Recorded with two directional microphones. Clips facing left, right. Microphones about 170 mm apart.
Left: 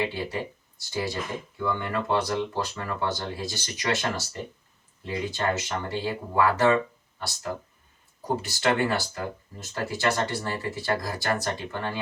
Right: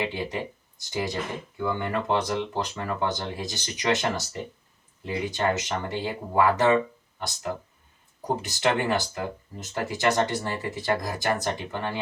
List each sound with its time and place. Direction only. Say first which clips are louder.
0.0 s speech: even; 20° right (ahead or behind)